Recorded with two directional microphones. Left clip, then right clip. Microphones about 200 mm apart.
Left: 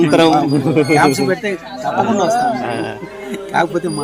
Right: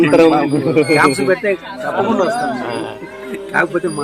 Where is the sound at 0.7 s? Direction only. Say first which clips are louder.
Right 1 dB; 55° left (ahead or behind).